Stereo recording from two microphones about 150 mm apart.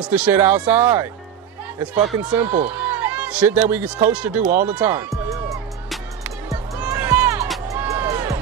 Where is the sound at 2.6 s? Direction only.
10° right (ahead or behind).